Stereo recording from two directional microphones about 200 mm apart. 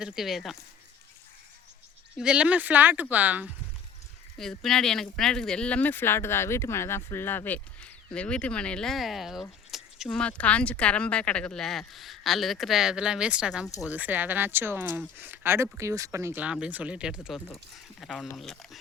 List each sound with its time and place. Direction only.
0.0 s speech: centre (ahead or behind)
2.1 s speech: 5° right (ahead or behind)